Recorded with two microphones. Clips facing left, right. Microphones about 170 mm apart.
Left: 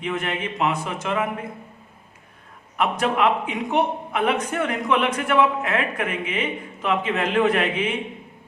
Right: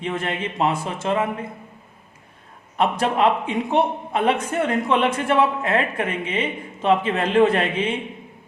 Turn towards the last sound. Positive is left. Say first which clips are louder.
# even
turn(degrees=-30)  # may be behind; listen again after turning